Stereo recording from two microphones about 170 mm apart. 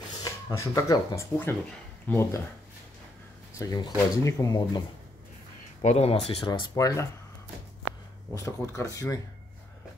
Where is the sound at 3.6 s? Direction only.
25° left (ahead or behind).